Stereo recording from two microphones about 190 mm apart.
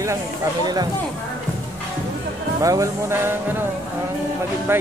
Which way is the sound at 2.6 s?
15° right (ahead or behind).